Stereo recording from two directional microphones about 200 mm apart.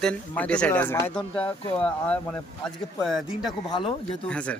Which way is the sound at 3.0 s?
Centre (ahead or behind).